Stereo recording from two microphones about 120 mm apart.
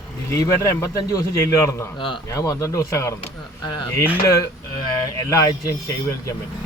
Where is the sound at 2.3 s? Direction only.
25° left (ahead or behind).